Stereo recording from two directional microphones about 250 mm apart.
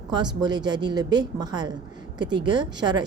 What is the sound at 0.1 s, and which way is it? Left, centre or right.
A woman's voice, centre.